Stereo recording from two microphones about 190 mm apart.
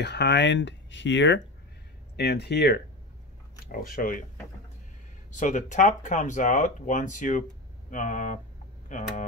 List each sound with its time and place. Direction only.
0.0 s speech: 65° left (ahead or behind)
2.1 s speech: 60° left (ahead or behind)
5.3 s speech: 40° left (ahead or behind)